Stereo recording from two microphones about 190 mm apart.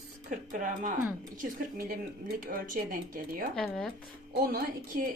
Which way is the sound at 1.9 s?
50° right (ahead or behind).